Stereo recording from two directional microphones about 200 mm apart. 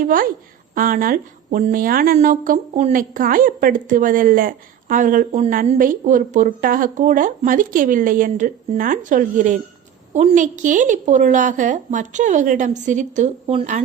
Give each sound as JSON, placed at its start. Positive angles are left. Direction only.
{"t": 0.0, "sound": "a woman's voice", "side_deg": -45}